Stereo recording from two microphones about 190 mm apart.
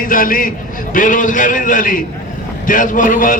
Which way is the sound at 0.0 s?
45° left (ahead or behind).